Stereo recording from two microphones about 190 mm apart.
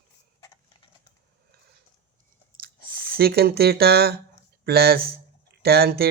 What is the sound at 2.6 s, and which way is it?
Speech, 50° right (ahead or behind).